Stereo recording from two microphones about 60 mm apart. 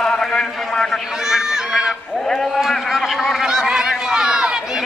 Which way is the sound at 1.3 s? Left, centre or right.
Centre.